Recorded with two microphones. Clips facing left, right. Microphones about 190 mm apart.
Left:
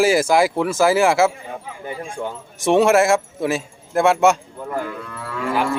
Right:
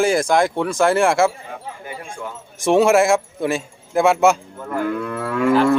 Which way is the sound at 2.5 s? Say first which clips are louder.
Even; centre (ahead or behind).